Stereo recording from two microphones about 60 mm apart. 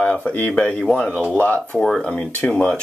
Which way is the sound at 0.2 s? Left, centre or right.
Left.